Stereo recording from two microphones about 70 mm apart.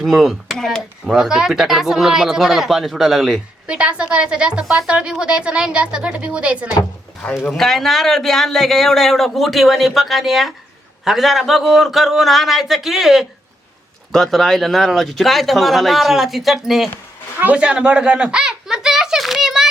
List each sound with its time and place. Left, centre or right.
0.0 s speech: centre
3.7 s a woman's voice: centre
7.4 s speech: centre
17.4 s a sound: centre